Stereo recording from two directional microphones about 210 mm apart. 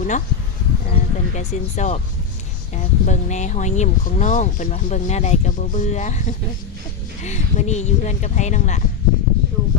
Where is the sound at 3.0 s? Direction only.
35° left (ahead or behind).